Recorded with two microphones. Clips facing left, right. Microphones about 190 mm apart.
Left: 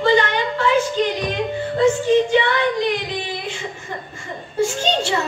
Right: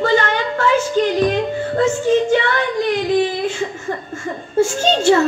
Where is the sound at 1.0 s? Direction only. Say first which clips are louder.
Right 5 dB; 50° right (ahead or behind).